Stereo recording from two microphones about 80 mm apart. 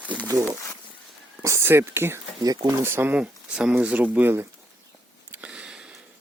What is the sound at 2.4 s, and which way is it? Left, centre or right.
Speech, right.